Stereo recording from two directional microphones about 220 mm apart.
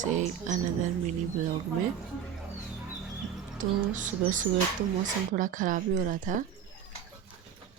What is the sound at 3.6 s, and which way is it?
Speech, 35° right (ahead or behind).